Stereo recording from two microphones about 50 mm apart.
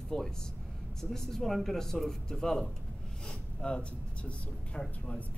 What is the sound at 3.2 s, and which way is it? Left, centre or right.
Speech, left.